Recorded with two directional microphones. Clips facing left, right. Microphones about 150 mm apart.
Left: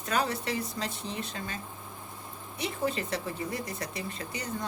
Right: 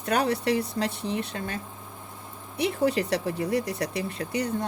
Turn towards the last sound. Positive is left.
turn(degrees=-65)  # may be behind; listen again after turning